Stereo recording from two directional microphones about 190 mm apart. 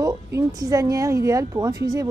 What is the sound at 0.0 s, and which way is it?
A woman's voice, 15° right (ahead or behind).